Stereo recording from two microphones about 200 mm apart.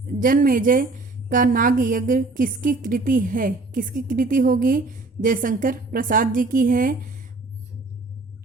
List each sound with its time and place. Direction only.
0.2 s a woman's voice: 45° right (ahead or behind)